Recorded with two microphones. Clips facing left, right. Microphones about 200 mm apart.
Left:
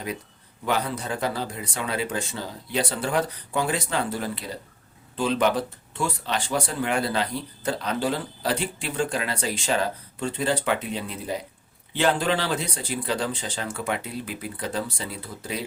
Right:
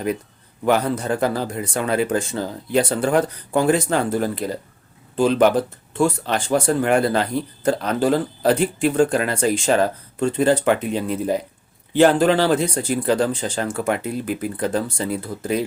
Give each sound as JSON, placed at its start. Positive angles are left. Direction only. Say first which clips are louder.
{"t": 0.6, "sound": "speech", "louder": "right 7 dB", "side_deg": -50}